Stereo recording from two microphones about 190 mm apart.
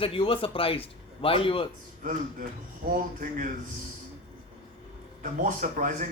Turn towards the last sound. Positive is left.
turn(degrees=-45)  # may be behind; listen again after turning